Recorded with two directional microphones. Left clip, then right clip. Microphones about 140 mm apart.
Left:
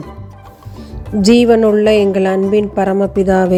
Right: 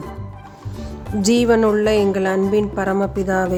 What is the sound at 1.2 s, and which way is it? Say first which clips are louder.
Speech: left 6 dB; 35° left (ahead or behind).